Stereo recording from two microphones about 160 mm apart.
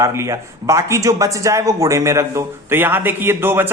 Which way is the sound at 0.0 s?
20° right (ahead or behind).